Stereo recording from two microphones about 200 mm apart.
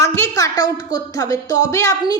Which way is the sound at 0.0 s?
15° left (ahead or behind).